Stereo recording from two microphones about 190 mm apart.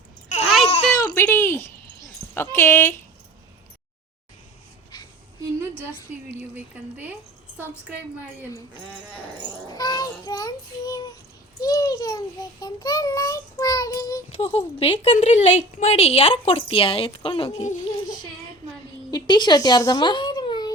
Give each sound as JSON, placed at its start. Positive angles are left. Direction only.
{"t": 0.3, "sound": "a sound", "side_deg": 35}
{"t": 1.1, "sound": "a sound", "side_deg": 10}
{"t": 6.2, "sound": "a woman's voice", "side_deg": -10}
{"t": 9.6, "sound": "child singing", "side_deg": 20}
{"t": 11.6, "sound": "a child's voice", "side_deg": 20}
{"t": 14.4, "sound": "speech", "side_deg": 30}
{"t": 19.1, "sound": "speech", "side_deg": 25}